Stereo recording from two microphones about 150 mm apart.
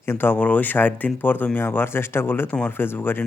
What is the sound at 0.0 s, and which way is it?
Speech, 15° left (ahead or behind).